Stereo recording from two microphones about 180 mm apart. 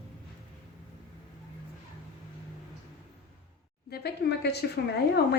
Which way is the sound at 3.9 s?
65° left (ahead or behind).